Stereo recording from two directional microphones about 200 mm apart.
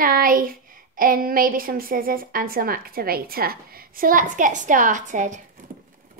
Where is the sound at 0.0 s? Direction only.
45° right (ahead or behind).